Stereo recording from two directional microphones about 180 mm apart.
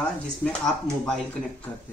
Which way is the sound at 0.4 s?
5° left (ahead or behind).